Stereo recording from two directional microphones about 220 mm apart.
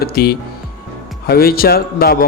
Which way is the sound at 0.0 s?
45° left (ahead or behind).